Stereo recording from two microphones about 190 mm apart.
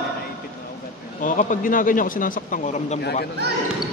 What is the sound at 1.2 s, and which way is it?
A man's voice, 45° left (ahead or behind).